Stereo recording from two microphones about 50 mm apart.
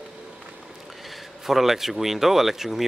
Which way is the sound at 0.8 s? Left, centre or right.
Centre.